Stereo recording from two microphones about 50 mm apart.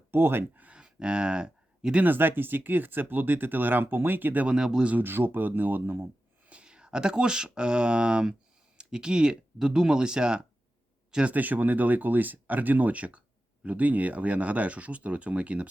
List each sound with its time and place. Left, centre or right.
0.1 s speech: right
0.8 s speech: centre
2.0 s speech: right
4.4 s speech: centre
4.9 s speech: right
6.5 s speech: right
11.3 s speech: right